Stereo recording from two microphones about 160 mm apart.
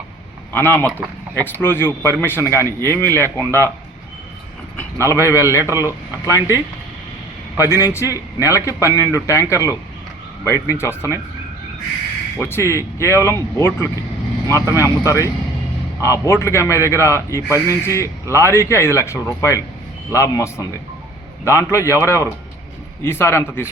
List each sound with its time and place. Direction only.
0.5 s speech: 10° left (ahead or behind)
4.8 s vehicle: 15° left (ahead or behind)
5.3 s a man's voice: 20° left (ahead or behind)
7.8 s a man's voice: 20° left (ahead or behind)
12.4 s a man's voice: 15° left (ahead or behind)